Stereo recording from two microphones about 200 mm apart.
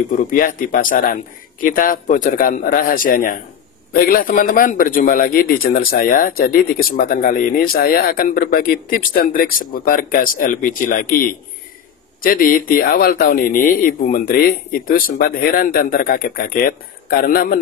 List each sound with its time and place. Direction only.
0.3 s a man's voice: 45° left (ahead or behind)